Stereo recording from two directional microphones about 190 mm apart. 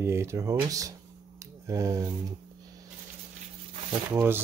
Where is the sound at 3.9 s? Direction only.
25° right (ahead or behind).